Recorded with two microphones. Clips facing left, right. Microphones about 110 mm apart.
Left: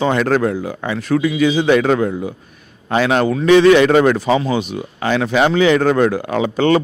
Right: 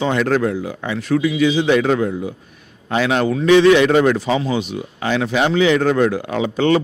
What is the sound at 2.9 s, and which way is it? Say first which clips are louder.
Speech: left 2 dB; 45° left (ahead or behind).